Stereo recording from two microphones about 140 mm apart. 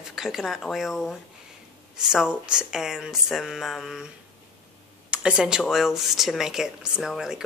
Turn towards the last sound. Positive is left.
turn(degrees=-5)  # may be behind; listen again after turning